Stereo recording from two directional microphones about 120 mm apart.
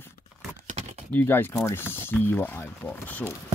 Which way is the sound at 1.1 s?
15° left (ahead or behind).